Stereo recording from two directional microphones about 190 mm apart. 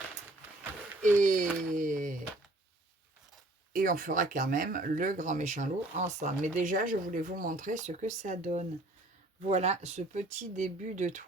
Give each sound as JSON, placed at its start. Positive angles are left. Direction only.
{"t": 1.2, "sound": "speech", "side_deg": -45}
{"t": 3.7, "sound": "speech", "side_deg": -45}